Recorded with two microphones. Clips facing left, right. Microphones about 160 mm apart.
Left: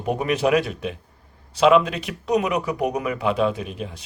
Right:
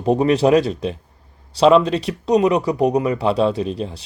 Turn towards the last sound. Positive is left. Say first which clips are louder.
# right 6 dB
turn(degrees=-30)  # may be behind; listen again after turning